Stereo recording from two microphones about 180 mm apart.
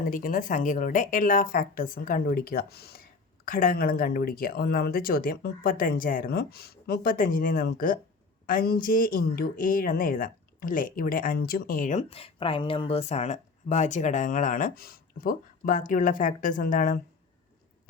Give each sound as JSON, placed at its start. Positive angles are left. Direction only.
{"t": 0.0, "sound": "a woman's voice", "side_deg": 50}
{"t": 12.0, "sound": "a woman's voice", "side_deg": 30}